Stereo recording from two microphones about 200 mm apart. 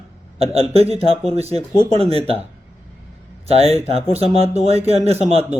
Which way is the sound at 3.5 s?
30° right (ahead or behind).